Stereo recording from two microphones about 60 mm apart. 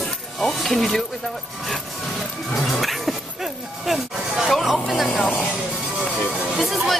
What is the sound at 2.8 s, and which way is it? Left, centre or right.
Dog, centre.